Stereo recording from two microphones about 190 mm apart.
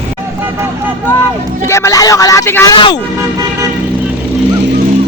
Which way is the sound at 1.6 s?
15° left (ahead or behind).